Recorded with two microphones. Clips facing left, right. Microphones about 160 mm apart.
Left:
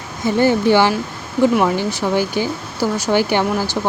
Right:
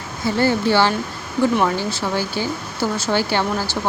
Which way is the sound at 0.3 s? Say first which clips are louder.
Left 4 dB; 15° left (ahead or behind).